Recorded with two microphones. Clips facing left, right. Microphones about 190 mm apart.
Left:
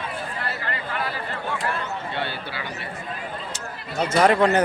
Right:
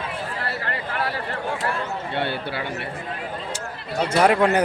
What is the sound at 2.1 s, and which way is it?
Speech, 55° right (ahead or behind).